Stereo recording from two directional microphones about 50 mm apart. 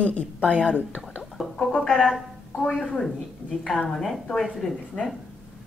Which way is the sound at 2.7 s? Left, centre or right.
Left.